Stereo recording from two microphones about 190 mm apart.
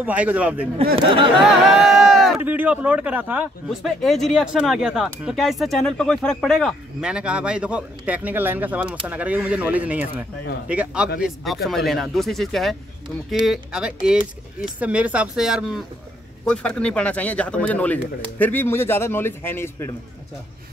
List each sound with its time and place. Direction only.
0.0 s speech: 10° right (ahead or behind)
1.0 s a sound: 25° right (ahead or behind)
1.8 s speech: centre (ahead or behind)